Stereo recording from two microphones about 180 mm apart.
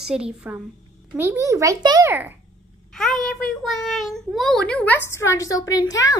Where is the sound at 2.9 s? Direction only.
Centre (ahead or behind).